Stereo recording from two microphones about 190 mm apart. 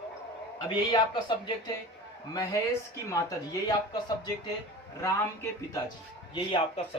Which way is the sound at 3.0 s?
20° left (ahead or behind).